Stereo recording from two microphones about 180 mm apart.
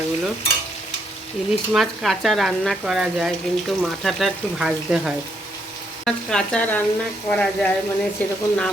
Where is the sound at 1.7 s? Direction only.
Centre (ahead or behind).